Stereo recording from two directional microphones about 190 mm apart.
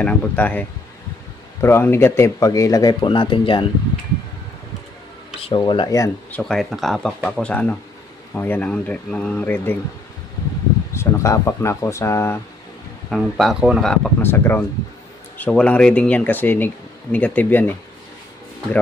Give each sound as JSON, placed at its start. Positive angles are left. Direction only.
{"t": 0.0, "sound": "speech", "side_deg": 10}
{"t": 5.4, "sound": "speech", "side_deg": 25}
{"t": 6.4, "sound": "speech", "side_deg": 0}
{"t": 10.9, "sound": "speech", "side_deg": 15}
{"t": 13.1, "sound": "speech", "side_deg": 0}